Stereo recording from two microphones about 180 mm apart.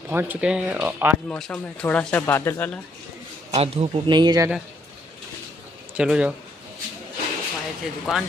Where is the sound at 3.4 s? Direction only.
35° right (ahead or behind).